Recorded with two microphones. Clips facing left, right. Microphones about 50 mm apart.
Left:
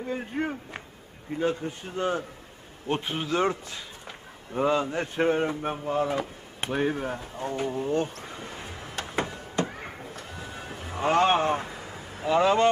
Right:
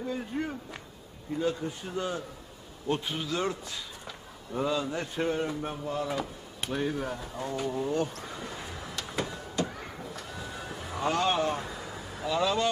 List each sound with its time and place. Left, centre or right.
0.0 s a man's voice: left
11.6 s vehicle: left